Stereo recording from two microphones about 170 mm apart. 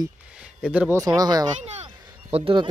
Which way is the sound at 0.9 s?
20° right (ahead or behind).